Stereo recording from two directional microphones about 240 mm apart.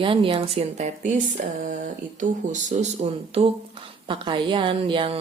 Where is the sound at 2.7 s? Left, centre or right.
Right.